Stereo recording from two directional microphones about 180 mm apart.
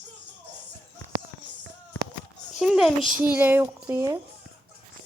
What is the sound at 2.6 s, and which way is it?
A child's voice, centre (ahead or behind).